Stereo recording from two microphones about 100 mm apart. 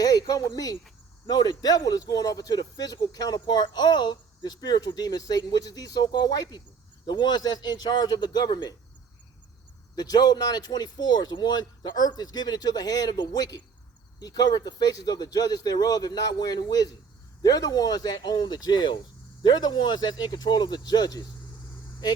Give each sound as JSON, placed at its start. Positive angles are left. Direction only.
{"t": 0.0, "sound": "a sound", "side_deg": 40}
{"t": 0.5, "sound": "speech", "side_deg": 40}
{"t": 9.9, "sound": "speech", "side_deg": 40}